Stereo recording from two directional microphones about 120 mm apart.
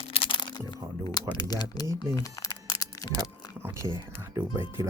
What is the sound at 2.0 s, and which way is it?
Crumpling, 35° left (ahead or behind).